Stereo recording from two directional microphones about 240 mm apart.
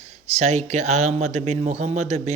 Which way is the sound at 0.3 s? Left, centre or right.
Right.